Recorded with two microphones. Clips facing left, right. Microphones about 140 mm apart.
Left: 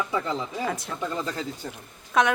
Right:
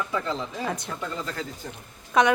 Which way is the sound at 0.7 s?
Centre (ahead or behind).